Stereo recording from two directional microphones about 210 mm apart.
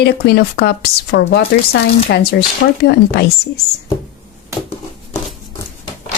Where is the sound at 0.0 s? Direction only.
50° left (ahead or behind).